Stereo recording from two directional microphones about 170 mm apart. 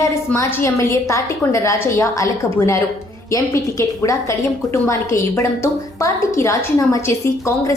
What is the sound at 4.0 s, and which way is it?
A woman's voice, 20° left (ahead or behind).